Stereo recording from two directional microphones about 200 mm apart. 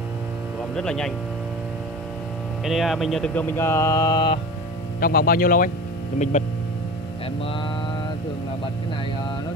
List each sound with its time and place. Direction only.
0.7 s speech: 5° left (ahead or behind)
2.6 s speech: centre (ahead or behind); by 4.4 s 20° left (ahead or behind)
5.0 s speech: 45° left (ahead or behind)